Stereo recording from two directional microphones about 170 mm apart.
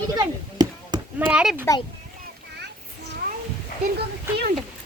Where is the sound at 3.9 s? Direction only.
70° right (ahead or behind).